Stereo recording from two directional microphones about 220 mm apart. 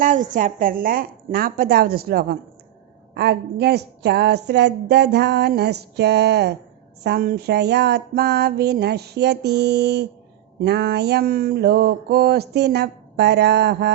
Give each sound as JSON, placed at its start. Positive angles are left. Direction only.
{"t": 0.0, "sound": "a woman's voice", "side_deg": -35}